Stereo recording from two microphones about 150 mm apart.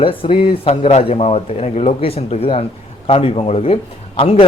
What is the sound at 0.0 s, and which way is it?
A man's voice, 35° left (ahead or behind).